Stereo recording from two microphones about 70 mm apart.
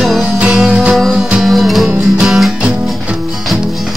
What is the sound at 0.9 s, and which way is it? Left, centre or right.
Music, centre.